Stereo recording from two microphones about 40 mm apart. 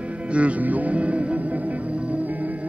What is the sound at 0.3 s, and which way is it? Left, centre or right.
Music, right.